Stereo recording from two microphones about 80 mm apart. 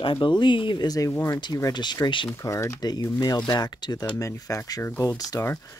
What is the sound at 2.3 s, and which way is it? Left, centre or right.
Speech, left.